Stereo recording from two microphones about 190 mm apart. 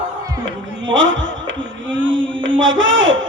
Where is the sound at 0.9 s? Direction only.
80° right.